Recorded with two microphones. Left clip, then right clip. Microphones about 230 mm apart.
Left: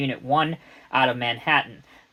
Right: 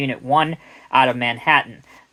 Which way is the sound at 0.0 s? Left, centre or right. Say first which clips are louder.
Right 4 dB; right.